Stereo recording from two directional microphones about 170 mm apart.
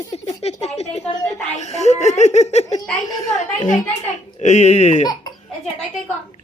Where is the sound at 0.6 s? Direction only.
40° left (ahead or behind).